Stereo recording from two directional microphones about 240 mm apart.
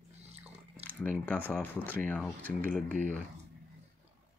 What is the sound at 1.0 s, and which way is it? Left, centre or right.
Speech, centre.